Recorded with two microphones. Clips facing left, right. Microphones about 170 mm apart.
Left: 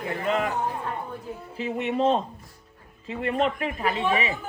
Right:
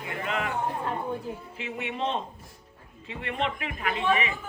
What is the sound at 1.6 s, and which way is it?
A woman's voice, 40° left (ahead or behind).